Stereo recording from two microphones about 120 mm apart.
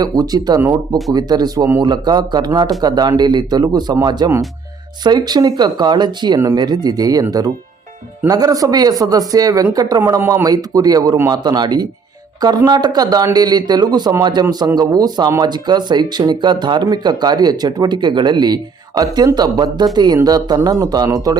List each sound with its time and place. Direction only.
0.0 s speech: 35° right (ahead or behind)